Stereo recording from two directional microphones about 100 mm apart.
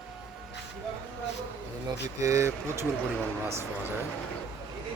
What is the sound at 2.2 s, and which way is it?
Speech, 30° right (ahead or behind).